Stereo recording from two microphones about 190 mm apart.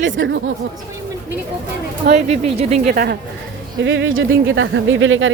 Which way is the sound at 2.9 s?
50° right (ahead or behind).